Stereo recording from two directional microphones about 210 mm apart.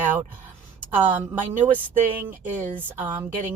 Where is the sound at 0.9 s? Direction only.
10° right (ahead or behind).